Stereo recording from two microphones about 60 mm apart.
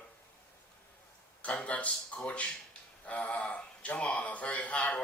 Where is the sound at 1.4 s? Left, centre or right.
Left.